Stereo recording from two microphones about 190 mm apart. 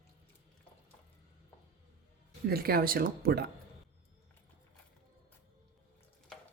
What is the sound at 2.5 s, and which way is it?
Speech, 50° right (ahead or behind).